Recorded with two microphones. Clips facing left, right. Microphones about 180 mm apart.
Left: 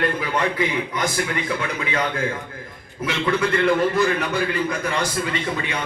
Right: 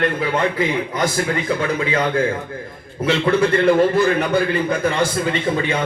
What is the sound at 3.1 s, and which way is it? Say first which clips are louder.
Speech: right 5 dB; 30° right (ahead or behind).